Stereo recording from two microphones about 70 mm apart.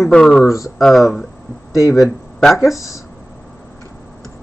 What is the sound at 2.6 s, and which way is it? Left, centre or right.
Speech, left.